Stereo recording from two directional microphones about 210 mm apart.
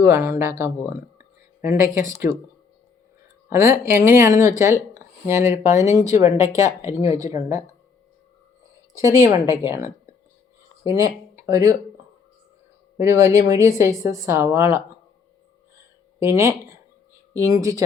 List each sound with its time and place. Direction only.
0.1 s speech: 10° right (ahead or behind)
3.5 s a woman's voice: 10° right (ahead or behind)
9.0 s a woman's voice: 15° right (ahead or behind)
13.0 s a woman's voice: 15° right (ahead or behind)
16.2 s a woman's voice: 15° right (ahead or behind)